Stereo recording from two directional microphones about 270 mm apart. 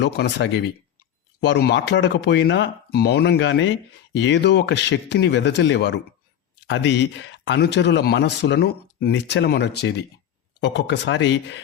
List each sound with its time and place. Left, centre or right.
0.0 s speech: left